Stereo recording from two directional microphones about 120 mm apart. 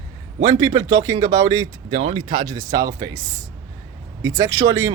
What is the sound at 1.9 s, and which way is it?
Speech, 45° right (ahead or behind).